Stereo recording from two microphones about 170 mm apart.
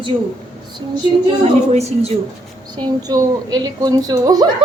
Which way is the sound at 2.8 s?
25° right (ahead or behind).